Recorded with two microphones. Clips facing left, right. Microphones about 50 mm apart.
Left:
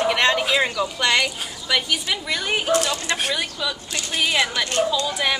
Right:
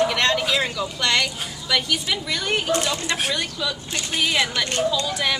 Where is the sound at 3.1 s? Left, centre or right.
Centre.